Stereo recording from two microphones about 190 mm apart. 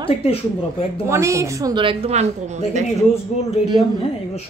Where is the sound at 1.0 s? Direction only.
15° right (ahead or behind); by 2.8 s 35° right (ahead or behind).